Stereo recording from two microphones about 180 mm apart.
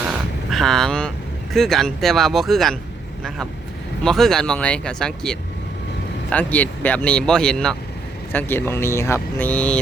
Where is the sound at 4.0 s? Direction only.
5° left (ahead or behind).